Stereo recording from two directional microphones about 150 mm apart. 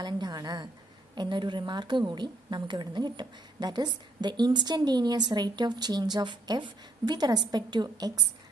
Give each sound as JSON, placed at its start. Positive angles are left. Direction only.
{"t": 0.0, "sound": "a woman's voice", "side_deg": -30}